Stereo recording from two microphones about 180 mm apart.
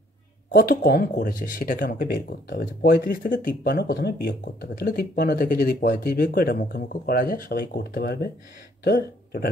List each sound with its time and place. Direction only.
0.5 s speech: 55° left (ahead or behind)